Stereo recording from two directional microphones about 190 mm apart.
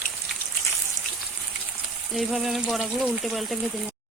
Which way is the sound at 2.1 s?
Centre (ahead or behind).